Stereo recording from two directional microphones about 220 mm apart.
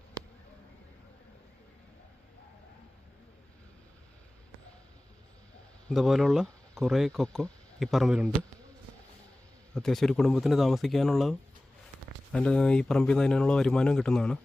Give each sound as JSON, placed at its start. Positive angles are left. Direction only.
{"t": 5.9, "sound": "speech", "side_deg": 0}
{"t": 9.7, "sound": "speech", "side_deg": 0}